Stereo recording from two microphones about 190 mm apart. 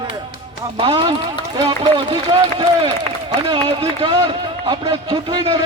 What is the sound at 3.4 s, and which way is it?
Speech, 30° right (ahead or behind).